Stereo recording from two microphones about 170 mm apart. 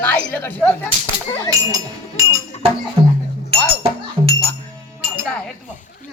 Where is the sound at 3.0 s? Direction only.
35° right (ahead or behind).